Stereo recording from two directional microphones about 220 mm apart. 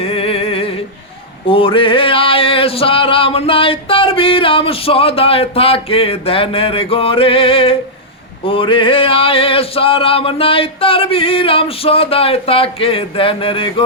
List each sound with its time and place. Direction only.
0.0 s music: 25° left (ahead or behind)
1.5 s male singing: 25° left (ahead or behind)